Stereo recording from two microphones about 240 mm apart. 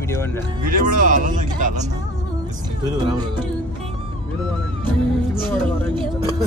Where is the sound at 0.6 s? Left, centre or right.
Right.